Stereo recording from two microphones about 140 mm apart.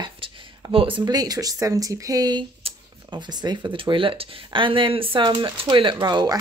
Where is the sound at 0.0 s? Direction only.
35° right (ahead or behind).